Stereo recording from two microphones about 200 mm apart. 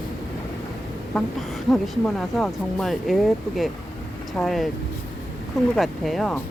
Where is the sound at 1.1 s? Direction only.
5° left (ahead or behind).